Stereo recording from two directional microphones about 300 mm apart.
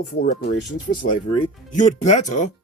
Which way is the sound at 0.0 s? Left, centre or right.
Left.